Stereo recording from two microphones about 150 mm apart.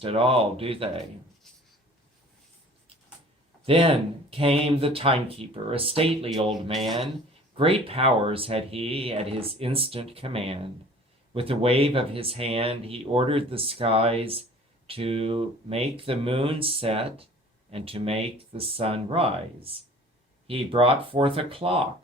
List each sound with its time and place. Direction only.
0.0 s speech: 40° right (ahead or behind)
3.7 s speech: 40° right (ahead or behind)
6.5 s speech: centre (ahead or behind)
7.5 s speech: 40° right (ahead or behind)
20.5 s speech: 40° right (ahead or behind)